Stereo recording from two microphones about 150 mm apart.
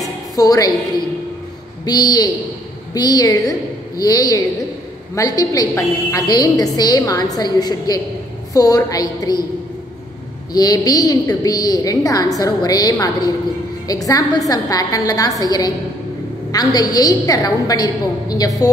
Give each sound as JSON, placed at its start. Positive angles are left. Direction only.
{"t": 0.4, "sound": "a woman's voice", "side_deg": 25}
{"t": 1.9, "sound": "a woman's voice", "side_deg": 30}
{"t": 10.5, "sound": "a woman's voice", "side_deg": 25}